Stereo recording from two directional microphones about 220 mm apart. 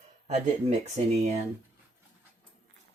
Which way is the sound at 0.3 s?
30° right (ahead or behind).